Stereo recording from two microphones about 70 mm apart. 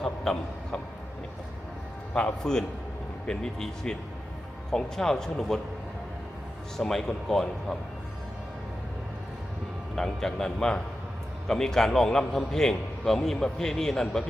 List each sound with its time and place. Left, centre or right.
0.0 s a sound: centre
2.1 s a man's voice: centre
6.7 s speech: centre
9.9 s a man's voice: centre